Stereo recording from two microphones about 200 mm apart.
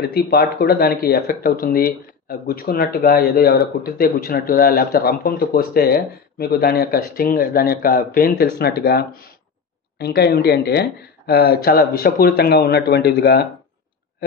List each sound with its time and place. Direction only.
0.0 s speech: 50° left (ahead or behind)